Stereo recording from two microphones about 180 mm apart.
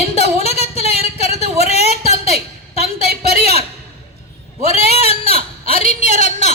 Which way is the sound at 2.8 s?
60° right (ahead or behind).